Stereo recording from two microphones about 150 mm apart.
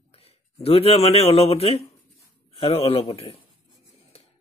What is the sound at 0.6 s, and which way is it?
Speech, 40° left (ahead or behind).